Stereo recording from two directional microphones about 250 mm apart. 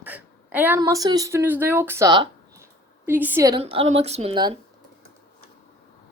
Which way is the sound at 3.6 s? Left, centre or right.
Right.